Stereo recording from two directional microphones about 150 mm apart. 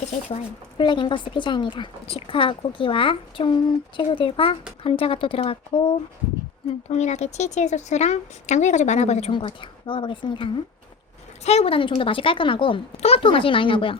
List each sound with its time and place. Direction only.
0.0 s speech: 50° left (ahead or behind)
0.8 s speech: 30° left (ahead or behind)
6.8 s speech: 50° left (ahead or behind)